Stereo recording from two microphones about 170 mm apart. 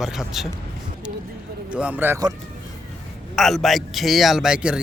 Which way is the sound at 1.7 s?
10° right (ahead or behind).